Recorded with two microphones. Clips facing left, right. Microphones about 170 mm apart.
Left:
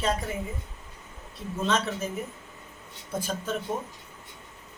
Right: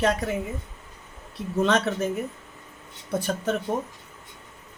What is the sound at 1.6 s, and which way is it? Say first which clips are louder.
Speech: right 5 dB; 65° right (ahead or behind).